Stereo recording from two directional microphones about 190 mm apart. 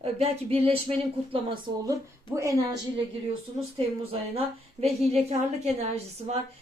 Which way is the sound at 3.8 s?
30° right (ahead or behind).